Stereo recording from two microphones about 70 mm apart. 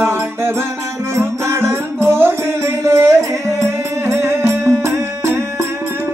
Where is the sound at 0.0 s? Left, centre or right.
Right.